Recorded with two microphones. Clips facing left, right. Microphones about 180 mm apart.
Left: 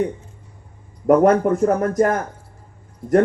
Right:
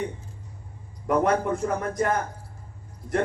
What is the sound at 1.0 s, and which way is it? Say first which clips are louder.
A man's voice: left 9 dB; 45° left (ahead or behind).